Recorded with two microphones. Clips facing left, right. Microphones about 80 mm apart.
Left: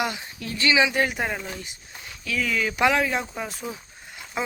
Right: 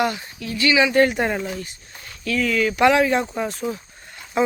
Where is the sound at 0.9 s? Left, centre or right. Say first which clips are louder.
Right 7 dB; centre.